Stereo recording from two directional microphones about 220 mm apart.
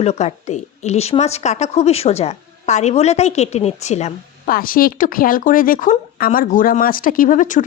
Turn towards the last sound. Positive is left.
turn(degrees=35)  # may be behind; listen again after turning